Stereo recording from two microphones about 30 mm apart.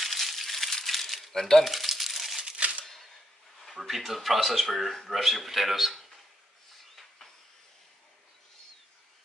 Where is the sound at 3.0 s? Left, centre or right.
Centre.